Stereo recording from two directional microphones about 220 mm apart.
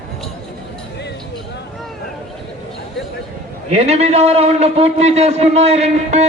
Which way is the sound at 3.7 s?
30° right (ahead or behind).